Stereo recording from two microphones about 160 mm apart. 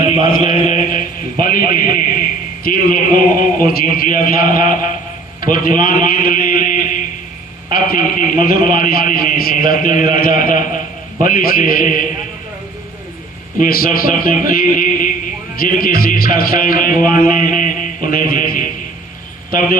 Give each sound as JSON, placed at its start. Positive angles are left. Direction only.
{"t": 0.3, "sound": "chant", "side_deg": 60}
{"t": 2.6, "sound": "music", "side_deg": 60}
{"t": 13.6, "sound": "music", "side_deg": 65}